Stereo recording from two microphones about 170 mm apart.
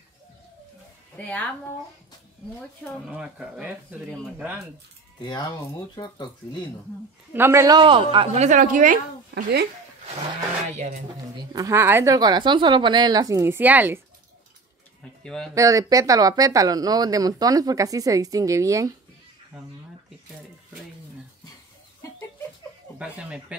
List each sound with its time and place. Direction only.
1.1 s a woman's voice: 10° left (ahead or behind)
3.1 s speech: 5° right (ahead or behind)
5.2 s speech: 25° left (ahead or behind)
7.3 s speech: 15° right (ahead or behind); by 8.5 s 30° right (ahead or behind)
8.5 s a woman's voice: 45° right (ahead or behind)
9.3 s speech: 80° right
11.3 s speech: 20° right (ahead or behind)
15.2 s speech: 5° left (ahead or behind)
15.5 s speech: 20° right (ahead or behind)
22.9 s speech: 5° right (ahead or behind)